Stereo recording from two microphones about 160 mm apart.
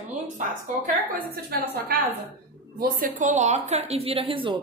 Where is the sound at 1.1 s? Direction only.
70° right (ahead or behind).